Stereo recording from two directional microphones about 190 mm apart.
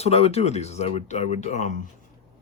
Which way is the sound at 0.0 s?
35° left (ahead or behind).